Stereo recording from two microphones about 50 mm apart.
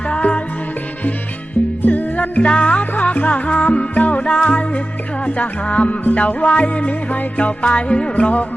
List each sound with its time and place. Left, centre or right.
0.1 s music: left
1.8 s music: left